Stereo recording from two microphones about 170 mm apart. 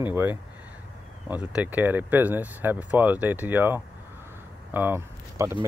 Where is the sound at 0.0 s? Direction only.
10° right (ahead or behind).